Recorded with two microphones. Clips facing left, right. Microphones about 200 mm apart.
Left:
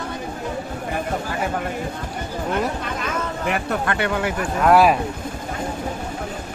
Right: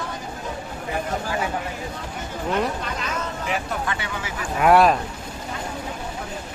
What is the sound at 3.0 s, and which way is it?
Speech, 60° left (ahead or behind).